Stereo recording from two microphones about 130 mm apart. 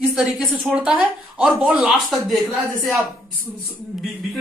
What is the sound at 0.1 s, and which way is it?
A woman's voice, 5° right (ahead or behind).